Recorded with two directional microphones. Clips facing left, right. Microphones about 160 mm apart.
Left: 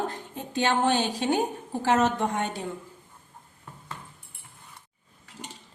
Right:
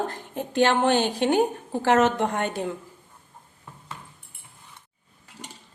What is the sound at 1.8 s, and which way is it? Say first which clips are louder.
Speech: right 3 dB; 70° right (ahead or behind).